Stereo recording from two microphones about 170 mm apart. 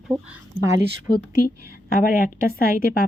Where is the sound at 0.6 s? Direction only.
20° right (ahead or behind).